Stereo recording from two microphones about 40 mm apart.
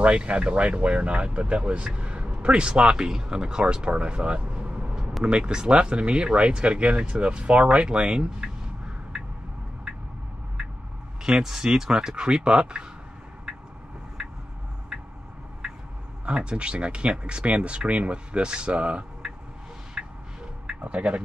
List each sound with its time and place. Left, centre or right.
0.0 s speech: right
11.2 s speech: centre
16.3 s speech: right
20.0 s music: right
20.6 s speech: right